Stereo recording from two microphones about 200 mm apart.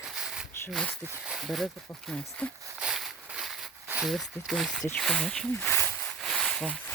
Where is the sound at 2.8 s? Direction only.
Centre (ahead or behind).